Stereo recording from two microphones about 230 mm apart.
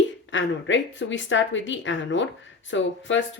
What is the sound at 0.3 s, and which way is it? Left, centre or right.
A woman's voice, left.